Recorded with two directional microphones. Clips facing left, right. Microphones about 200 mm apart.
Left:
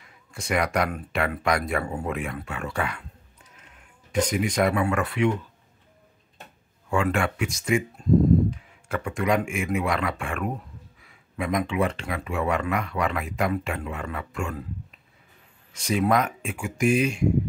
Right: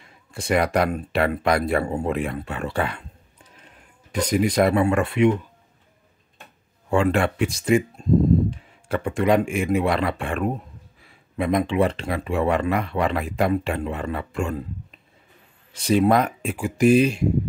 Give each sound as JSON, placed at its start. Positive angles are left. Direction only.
{"t": 0.0, "sound": "speech", "side_deg": -30}
{"t": 6.9, "sound": "speech", "side_deg": -30}
{"t": 15.7, "sound": "speech", "side_deg": -30}